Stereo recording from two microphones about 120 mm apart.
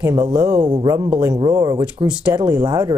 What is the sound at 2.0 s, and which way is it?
Speech, 40° right (ahead or behind).